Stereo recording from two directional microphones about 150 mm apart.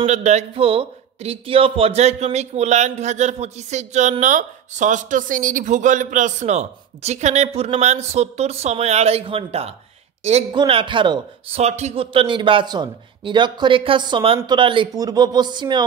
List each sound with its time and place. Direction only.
0.0 s a man's voice: 50° right (ahead or behind); by 11.6 s 35° right (ahead or behind)
11.6 s a man's voice: 45° right (ahead or behind); by 15.8 s 30° right (ahead or behind)